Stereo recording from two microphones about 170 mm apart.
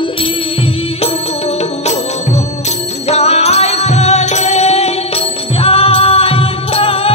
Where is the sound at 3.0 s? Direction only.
40° left (ahead or behind).